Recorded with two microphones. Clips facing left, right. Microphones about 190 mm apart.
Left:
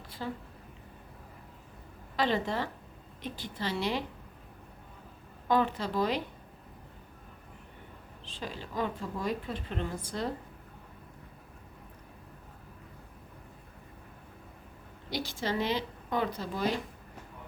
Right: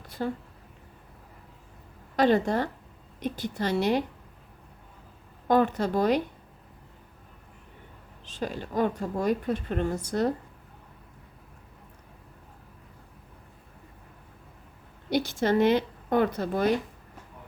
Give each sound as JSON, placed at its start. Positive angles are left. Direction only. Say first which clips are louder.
{"t": 0.2, "sound": "a woman's voice", "louder": "right 7 dB", "side_deg": -50}
{"t": 2.1, "sound": "a woman's voice", "louder": "right 7 dB", "side_deg": -45}
{"t": 5.5, "sound": "a woman's voice", "louder": "right 5 dB", "side_deg": -45}
{"t": 8.4, "sound": "a woman's voice", "louder": "right 7 dB", "side_deg": -50}
{"t": 15.1, "sound": "a sound", "louder": "right 9 dB", "side_deg": -50}
{"t": 16.4, "sound": "speech", "louder": "right 7 dB", "side_deg": -55}